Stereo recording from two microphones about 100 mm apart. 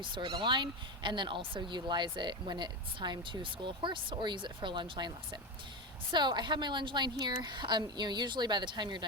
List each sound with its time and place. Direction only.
0.0 s speech: 55° right (ahead or behind)